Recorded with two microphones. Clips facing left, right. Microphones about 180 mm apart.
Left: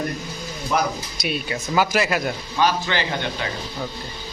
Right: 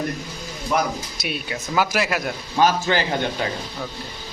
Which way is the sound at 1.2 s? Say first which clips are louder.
Left 5 dB; centre (ahead or behind).